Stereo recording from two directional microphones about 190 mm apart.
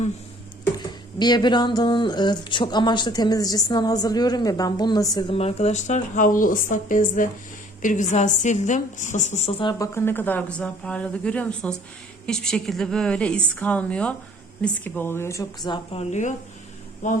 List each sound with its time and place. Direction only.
1.2 s speech: 20° left (ahead or behind)
5.4 s a woman's voice: 35° left (ahead or behind)
9.6 s a woman's voice: 20° left (ahead or behind); by 17.2 s 40° left (ahead or behind)